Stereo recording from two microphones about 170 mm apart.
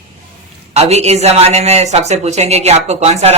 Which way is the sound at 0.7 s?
40° right (ahead or behind).